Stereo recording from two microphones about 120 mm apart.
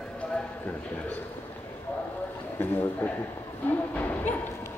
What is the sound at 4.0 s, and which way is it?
Music, 15° left (ahead or behind).